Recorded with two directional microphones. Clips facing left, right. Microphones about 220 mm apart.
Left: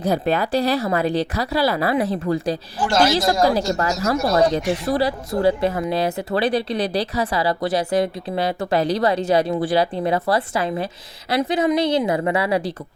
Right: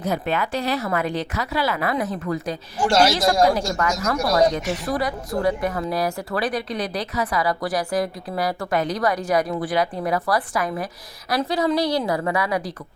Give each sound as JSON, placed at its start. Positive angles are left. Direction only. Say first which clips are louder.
{"t": 0.0, "sound": "speech", "louder": "left 4 dB", "side_deg": 35}
{"t": 2.8, "sound": "speech", "louder": "even", "side_deg": -10}
{"t": 3.4, "sound": "speech", "louder": "left 1 dB", "side_deg": 30}